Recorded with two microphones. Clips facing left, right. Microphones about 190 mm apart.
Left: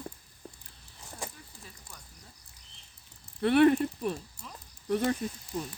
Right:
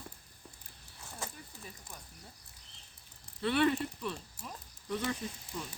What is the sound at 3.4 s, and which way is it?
Speech, 55° left (ahead or behind).